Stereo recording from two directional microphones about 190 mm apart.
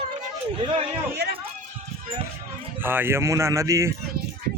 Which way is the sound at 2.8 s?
10° right (ahead or behind).